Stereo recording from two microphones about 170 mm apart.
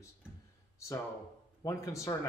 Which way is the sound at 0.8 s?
15° left (ahead or behind).